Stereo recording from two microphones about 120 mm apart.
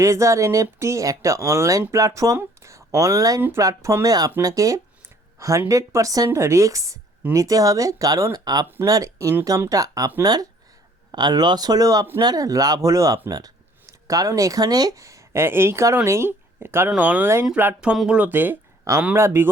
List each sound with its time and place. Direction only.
0.0 s speech: 25° right (ahead or behind)
11.1 s speech: 35° right (ahead or behind); by 19.5 s 20° right (ahead or behind)